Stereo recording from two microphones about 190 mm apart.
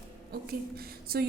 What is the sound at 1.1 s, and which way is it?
Speech, 55° right (ahead or behind).